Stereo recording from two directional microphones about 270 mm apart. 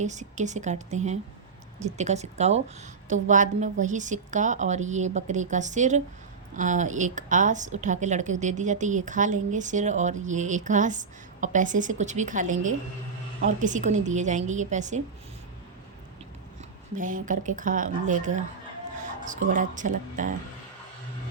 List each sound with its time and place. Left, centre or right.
0.0 s a woman's voice: right
16.9 s a woman's voice: right